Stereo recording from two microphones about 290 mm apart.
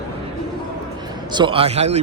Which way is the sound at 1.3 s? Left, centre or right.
Centre.